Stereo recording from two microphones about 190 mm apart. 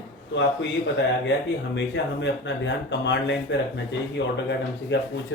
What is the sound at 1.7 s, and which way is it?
Speech, 70° left (ahead or behind).